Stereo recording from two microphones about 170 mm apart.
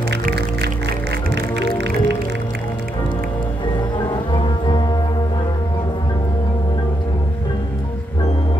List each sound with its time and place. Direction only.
0.1 s music: 70° right (ahead or behind)
1.6 s music: 90° right
4.3 s music: 25° left (ahead or behind)